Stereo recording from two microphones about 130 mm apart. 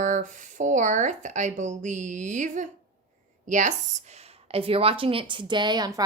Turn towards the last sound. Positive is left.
turn(degrees=-30)  # may be behind; listen again after turning